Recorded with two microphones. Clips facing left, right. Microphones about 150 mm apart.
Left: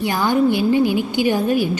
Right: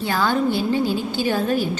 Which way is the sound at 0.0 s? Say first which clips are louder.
Left 3 dB; 15° left (ahead or behind).